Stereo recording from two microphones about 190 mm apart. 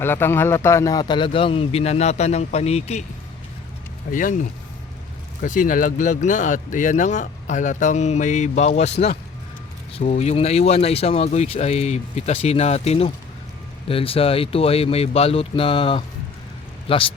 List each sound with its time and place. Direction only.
0.0 s a man's voice: 10° left (ahead or behind); by 3.0 s 35° left (ahead or behind)
4.1 s speech: 45° left (ahead or behind)
5.4 s a man's voice: 45° left (ahead or behind)